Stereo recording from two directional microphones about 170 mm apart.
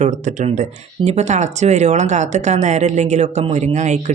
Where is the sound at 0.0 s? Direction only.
45° right (ahead or behind).